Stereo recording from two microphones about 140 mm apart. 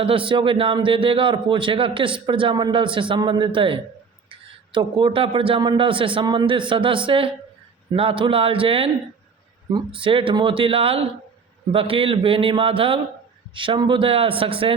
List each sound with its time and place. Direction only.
0.0 s a man's voice: 40° right (ahead or behind)